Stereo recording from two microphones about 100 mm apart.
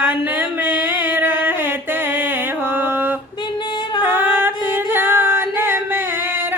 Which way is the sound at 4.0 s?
20° right (ahead or behind).